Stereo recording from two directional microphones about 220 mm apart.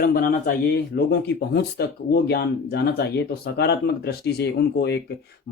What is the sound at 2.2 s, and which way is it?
Speech, 45° left (ahead or behind).